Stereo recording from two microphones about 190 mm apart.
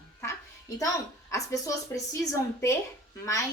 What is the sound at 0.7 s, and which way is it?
Speech, 15° left (ahead or behind).